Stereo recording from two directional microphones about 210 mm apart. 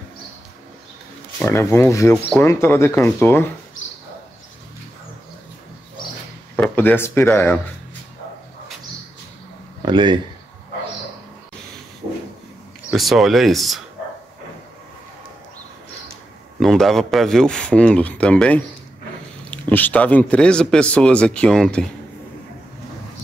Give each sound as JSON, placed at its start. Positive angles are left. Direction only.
{"t": 1.4, "sound": "speech", "side_deg": 10}
{"t": 3.8, "sound": "a sound", "side_deg": 65}
{"t": 6.5, "sound": "speech", "side_deg": 5}
{"t": 9.8, "sound": "speech", "side_deg": -20}
{"t": 12.9, "sound": "speech", "side_deg": 0}
{"t": 16.5, "sound": "speech", "side_deg": 0}